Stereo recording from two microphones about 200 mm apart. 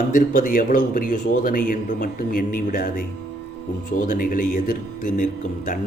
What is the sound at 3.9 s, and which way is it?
A man's voice, 45° left (ahead or behind).